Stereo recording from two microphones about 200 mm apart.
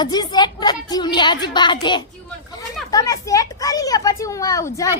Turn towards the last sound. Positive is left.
turn(degrees=15)  # may be behind; listen again after turning